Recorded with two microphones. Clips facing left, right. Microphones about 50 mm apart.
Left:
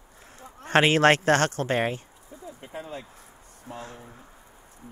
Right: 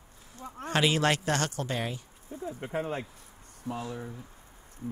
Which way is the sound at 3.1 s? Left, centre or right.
Left.